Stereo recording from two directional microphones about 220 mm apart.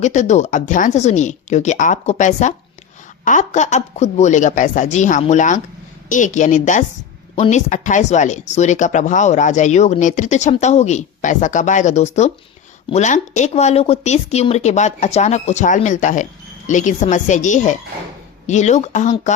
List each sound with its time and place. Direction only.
0.0 s speech: 30° left (ahead or behind)